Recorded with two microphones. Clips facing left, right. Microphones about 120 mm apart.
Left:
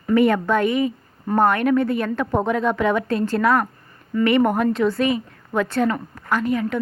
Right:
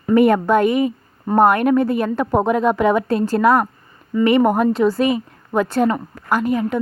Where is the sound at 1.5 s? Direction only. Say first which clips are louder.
Right 3 dB; 40° right (ahead or behind).